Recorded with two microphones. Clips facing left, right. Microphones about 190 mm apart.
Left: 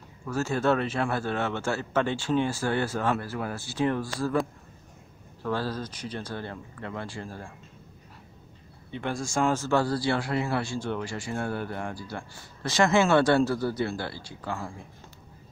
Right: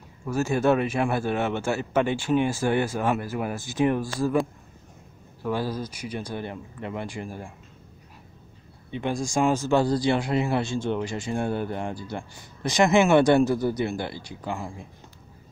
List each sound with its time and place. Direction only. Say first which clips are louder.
0.2 s speech: right 3 dB; 15° right (ahead or behind)
5.4 s speech: right 2 dB; 15° right (ahead or behind)
8.9 s speech: right 3 dB; 15° right (ahead or behind)